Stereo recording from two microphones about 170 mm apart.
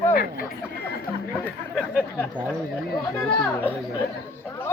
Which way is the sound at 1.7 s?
5° right (ahead or behind).